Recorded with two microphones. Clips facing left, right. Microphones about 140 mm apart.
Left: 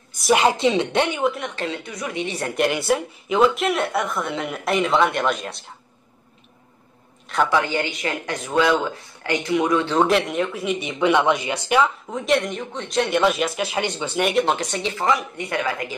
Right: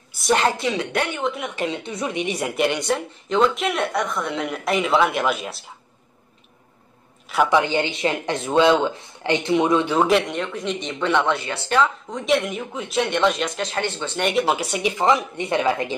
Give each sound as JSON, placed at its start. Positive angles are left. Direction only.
{"t": 0.1, "sound": "speech", "side_deg": 0}
{"t": 0.4, "sound": "speech", "side_deg": 20}
{"t": 1.2, "sound": "speech", "side_deg": 0}
{"t": 1.5, "sound": "a woman's voice", "side_deg": -15}
{"t": 1.8, "sound": "speech", "side_deg": -25}
{"t": 2.5, "sound": "speech", "side_deg": 0}
{"t": 7.4, "sound": "speech", "side_deg": -20}
{"t": 9.8, "sound": "speech", "side_deg": 0}